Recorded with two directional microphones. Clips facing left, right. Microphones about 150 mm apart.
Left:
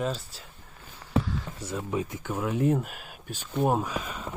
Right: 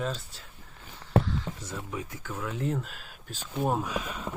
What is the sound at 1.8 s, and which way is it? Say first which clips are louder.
Speech: left 6 dB; 25° left (ahead or behind).